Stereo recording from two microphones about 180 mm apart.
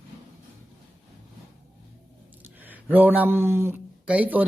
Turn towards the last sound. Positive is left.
turn(degrees=-10)  # may be behind; listen again after turning